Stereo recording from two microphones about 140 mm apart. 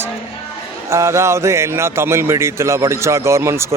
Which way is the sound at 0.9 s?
20° right (ahead or behind).